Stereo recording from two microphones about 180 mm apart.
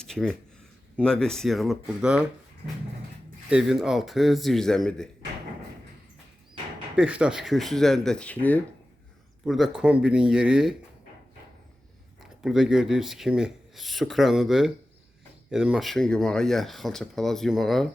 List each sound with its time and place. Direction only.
0.0 s a sound: 5° left (ahead or behind)
0.9 s speech: 5° left (ahead or behind)
3.5 s speech: 5° right (ahead or behind)
6.9 s speech: 5° right (ahead or behind)
9.4 s speech: centre (ahead or behind)
12.2 s speech: centre (ahead or behind)